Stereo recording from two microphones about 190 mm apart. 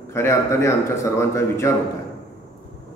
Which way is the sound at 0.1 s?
15° left (ahead or behind).